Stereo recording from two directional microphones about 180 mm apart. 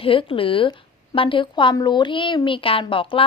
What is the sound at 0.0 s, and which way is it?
A woman's voice, 30° left (ahead or behind).